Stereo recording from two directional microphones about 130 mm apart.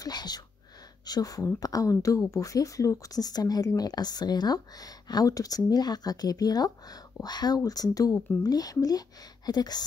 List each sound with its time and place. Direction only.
0.0 s speech: 30° left (ahead or behind)